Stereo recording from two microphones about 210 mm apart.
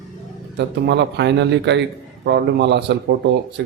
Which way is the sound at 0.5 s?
55° right (ahead or behind).